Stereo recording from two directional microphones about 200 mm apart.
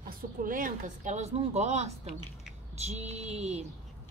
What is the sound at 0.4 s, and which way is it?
Speech, 40° right (ahead or behind).